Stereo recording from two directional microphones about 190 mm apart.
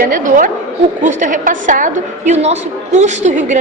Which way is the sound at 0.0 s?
45° right (ahead or behind).